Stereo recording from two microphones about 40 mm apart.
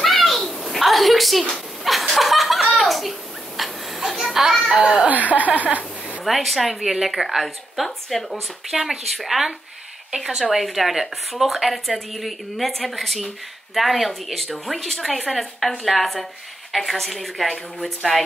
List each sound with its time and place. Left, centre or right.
0.0 s a sound: centre
1.9 s chuckle: centre
2.8 s a sound: centre
5.0 s speech: right
6.2 s a woman's voice: centre
10.1 s a woman's voice: centre
10.5 s a woman's voice: centre